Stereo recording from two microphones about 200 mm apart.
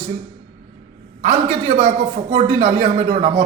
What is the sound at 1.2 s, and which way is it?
A man's voice, 35° right (ahead or behind).